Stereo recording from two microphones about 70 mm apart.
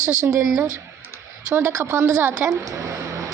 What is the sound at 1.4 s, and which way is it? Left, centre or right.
A woman's voice, right.